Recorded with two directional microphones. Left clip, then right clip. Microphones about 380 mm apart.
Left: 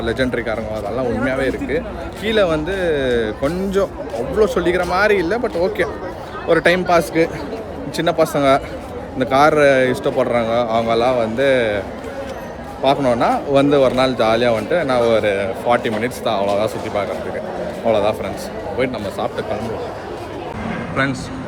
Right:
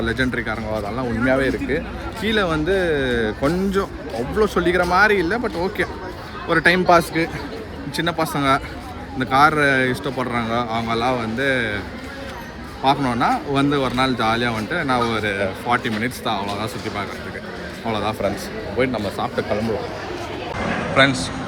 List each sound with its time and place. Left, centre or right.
0.0 s speech: centre
12.8 s speech: centre
20.9 s speech: centre